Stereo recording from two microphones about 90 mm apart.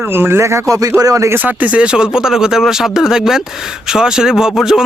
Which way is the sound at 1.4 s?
20° right (ahead or behind).